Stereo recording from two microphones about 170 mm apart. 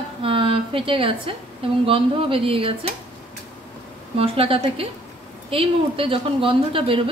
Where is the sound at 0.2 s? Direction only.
30° right (ahead or behind).